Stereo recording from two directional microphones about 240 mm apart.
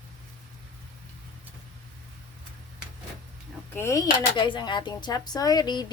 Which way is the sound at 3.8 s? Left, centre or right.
Centre.